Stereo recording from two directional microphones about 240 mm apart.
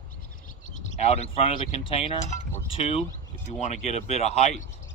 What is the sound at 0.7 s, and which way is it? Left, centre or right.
Speech, left.